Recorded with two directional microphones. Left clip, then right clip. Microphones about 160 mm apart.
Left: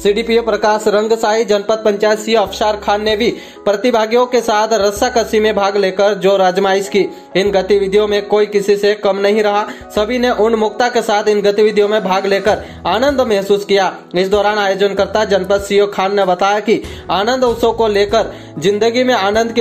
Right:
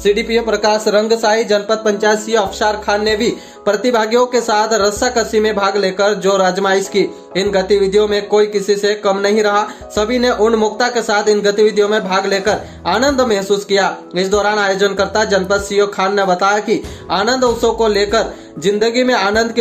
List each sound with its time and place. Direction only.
0.0 s speech: 10° left (ahead or behind)